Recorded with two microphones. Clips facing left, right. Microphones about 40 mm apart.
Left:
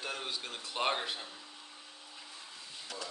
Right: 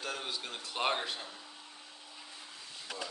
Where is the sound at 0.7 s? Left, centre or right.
Centre.